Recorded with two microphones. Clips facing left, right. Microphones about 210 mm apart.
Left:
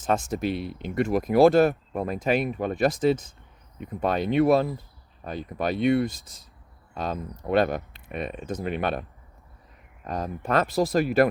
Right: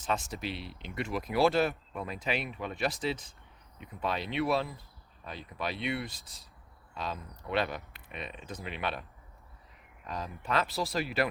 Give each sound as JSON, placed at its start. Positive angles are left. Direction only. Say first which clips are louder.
{"t": 0.0, "sound": "speech", "louder": "left 9 dB", "side_deg": 45}